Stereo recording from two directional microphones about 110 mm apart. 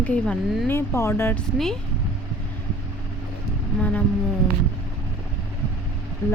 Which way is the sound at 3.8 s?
10° left (ahead or behind).